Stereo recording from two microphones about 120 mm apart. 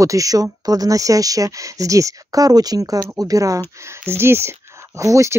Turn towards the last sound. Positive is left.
turn(degrees=-25)  # may be behind; listen again after turning